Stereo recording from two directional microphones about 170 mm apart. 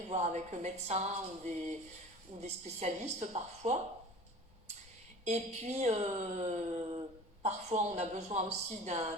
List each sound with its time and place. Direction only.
0.1 s speech: 40° right (ahead or behind)
5.2 s speech: 40° right (ahead or behind)